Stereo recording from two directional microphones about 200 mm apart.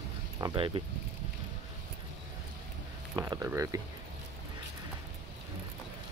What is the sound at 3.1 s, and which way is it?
Speech, 15° right (ahead or behind).